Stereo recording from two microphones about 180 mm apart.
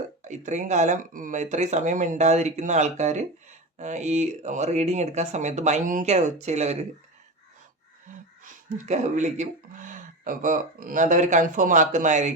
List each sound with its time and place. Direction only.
0.3 s speech: 40° right (ahead or behind)
8.4 s speech: 40° right (ahead or behind)